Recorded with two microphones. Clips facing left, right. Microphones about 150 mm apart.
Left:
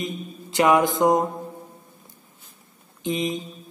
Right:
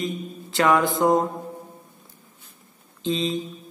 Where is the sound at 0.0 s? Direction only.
20° left (ahead or behind).